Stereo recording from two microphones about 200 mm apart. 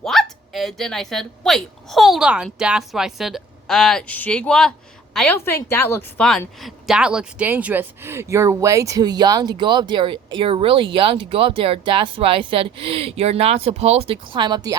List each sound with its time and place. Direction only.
0.0 s a woman's voice: centre (ahead or behind); by 14.8 s 20° right (ahead or behind)